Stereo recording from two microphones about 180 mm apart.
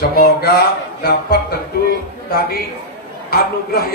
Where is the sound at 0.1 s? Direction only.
55° left (ahead or behind).